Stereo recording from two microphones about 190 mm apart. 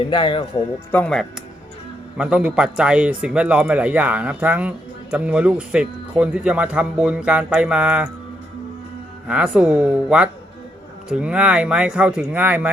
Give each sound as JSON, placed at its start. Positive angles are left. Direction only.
{"t": 0.0, "sound": "a man's voice", "side_deg": 25}
{"t": 0.9, "sound": "speech", "side_deg": 5}
{"t": 2.1, "sound": "a man's voice", "side_deg": -5}
{"t": 9.2, "sound": "speech", "side_deg": -5}